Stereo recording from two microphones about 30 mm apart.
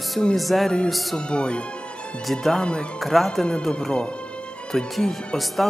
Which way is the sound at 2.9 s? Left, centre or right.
Centre.